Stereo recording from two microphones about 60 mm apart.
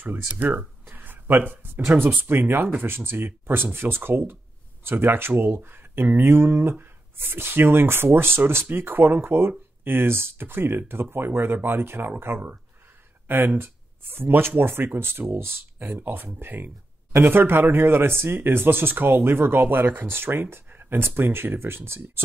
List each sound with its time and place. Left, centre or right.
0.0 s speech: right
0.8 s a sound: right
2.0 s speech: right
13.6 s speech: right